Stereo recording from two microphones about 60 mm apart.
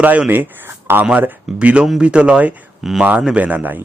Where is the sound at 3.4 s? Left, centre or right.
Right.